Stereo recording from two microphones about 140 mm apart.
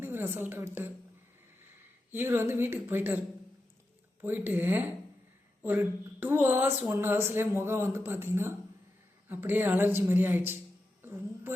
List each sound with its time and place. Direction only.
0.0 s a woman's voice: 15° right (ahead or behind)
2.1 s speech: 15° right (ahead or behind)
4.2 s speech: 15° right (ahead or behind)
11.0 s a sound: 15° right (ahead or behind)